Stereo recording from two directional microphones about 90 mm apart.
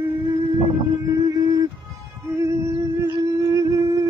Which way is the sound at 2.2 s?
35° right (ahead or behind).